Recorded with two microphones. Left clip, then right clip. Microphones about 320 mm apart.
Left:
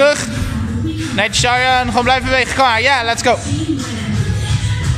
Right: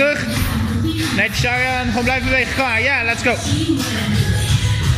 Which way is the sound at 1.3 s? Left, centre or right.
Left.